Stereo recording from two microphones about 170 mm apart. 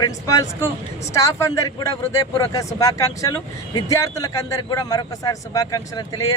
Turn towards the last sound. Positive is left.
turn(degrees=20)  # may be behind; listen again after turning